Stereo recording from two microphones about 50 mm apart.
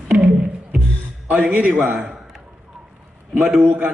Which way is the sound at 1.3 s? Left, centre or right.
Right.